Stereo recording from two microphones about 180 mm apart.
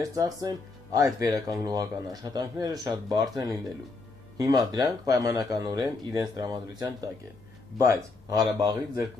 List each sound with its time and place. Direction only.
0.0 s speech: 20° right (ahead or behind)